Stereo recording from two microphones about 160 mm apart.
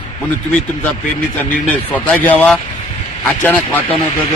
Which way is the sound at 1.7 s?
10° left (ahead or behind).